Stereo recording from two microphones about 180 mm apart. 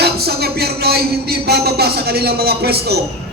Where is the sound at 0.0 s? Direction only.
60° right (ahead or behind).